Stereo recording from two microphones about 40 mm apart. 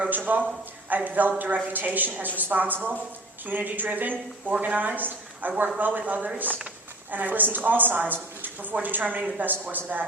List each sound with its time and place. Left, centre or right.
0.0 s a woman's voice: right